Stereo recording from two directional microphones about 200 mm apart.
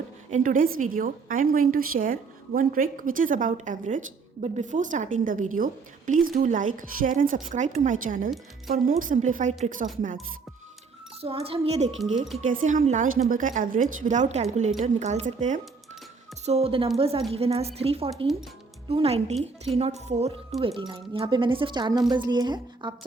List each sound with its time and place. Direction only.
0.3 s a woman's voice: 40° right (ahead or behind)
11.2 s a woman's voice: 30° right (ahead or behind)